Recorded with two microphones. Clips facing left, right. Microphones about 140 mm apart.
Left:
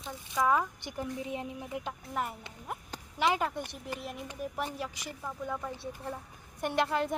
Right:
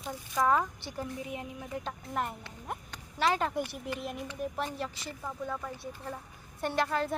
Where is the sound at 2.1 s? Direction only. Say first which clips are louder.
Right 1 dB; 5° left (ahead or behind).